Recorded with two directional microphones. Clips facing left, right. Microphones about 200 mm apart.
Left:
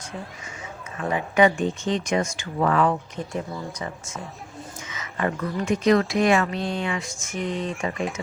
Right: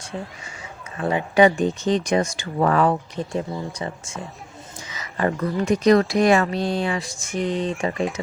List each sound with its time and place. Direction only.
1.0 s speech: 35° right (ahead or behind)
7.3 s speech: centre (ahead or behind)